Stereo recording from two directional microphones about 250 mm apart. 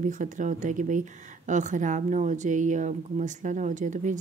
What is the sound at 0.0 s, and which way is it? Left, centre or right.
Speech, right.